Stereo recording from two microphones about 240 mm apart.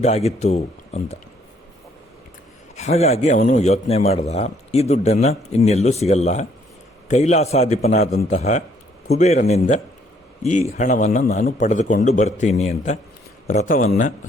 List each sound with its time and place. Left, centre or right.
0.0 s a man's voice: left
2.7 s a man's voice: left